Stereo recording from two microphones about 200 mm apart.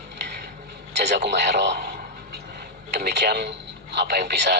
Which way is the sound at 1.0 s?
60° right (ahead or behind).